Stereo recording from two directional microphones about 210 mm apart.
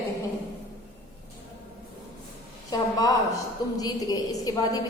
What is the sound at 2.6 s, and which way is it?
A woman's voice, 15° left (ahead or behind).